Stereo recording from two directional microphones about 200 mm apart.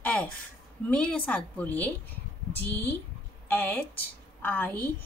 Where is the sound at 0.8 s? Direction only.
5° left (ahead or behind).